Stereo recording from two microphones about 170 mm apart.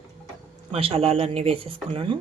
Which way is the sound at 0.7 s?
35° right (ahead or behind).